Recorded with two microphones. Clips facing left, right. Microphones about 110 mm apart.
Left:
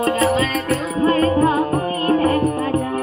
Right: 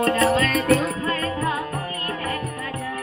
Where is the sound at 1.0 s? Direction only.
35° left (ahead or behind).